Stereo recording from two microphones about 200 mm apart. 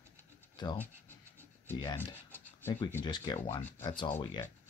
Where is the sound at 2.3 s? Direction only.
10° left (ahead or behind).